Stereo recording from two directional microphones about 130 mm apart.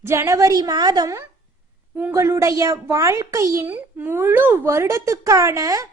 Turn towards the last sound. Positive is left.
turn(degrees=-25)  # may be behind; listen again after turning